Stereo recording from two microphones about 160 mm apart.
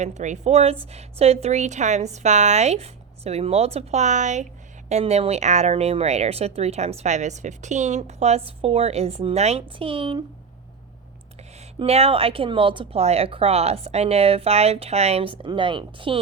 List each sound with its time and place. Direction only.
0.0 s speech: 45° right (ahead or behind)
11.8 s speech: 40° right (ahead or behind)